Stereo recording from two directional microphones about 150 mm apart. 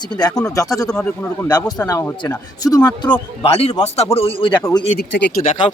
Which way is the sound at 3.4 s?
40° left (ahead or behind).